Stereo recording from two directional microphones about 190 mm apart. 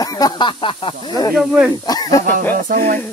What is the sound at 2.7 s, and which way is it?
Speech, 45° right (ahead or behind).